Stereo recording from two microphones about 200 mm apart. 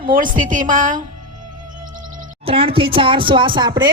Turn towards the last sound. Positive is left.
turn(degrees=-20)  # may be behind; listen again after turning